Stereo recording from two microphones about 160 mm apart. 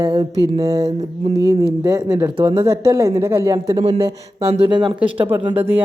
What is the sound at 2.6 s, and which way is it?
Speech, 20° right (ahead or behind).